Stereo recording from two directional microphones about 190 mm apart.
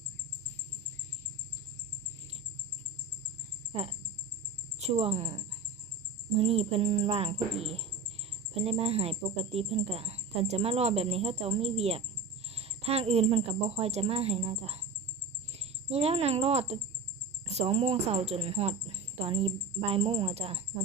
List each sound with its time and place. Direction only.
4.9 s speech: 30° right (ahead or behind)